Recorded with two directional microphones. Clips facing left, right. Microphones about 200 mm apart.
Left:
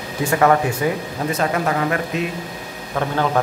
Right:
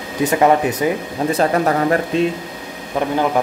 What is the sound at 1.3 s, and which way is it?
Speech, 40° right (ahead or behind).